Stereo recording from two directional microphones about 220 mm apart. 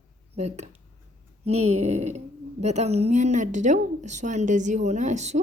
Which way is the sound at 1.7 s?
30° right (ahead or behind).